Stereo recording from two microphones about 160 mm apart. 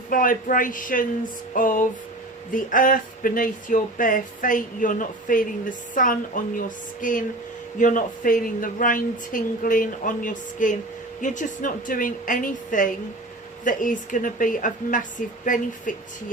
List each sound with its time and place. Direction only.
0.1 s speech: 60° left (ahead or behind)